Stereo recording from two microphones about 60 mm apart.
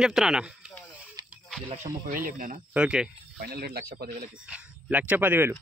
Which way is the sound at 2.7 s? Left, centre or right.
Centre.